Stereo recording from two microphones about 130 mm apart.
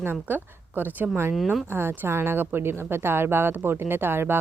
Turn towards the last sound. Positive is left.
turn(degrees=-15)  # may be behind; listen again after turning